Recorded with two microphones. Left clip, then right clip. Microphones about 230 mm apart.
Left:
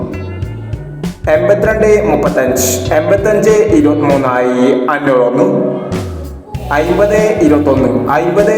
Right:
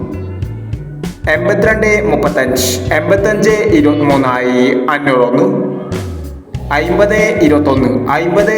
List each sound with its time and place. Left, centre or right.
1.2 s a man's voice: right
3.9 s speech: centre
4.2 s a man's voice: right
6.7 s a man's voice: right